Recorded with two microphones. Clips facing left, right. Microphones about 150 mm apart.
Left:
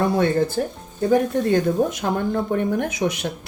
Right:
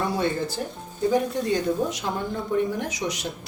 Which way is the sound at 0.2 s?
55° left (ahead or behind).